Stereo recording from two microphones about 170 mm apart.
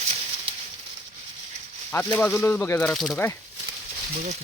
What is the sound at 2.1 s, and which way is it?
Speech, 10° left (ahead or behind).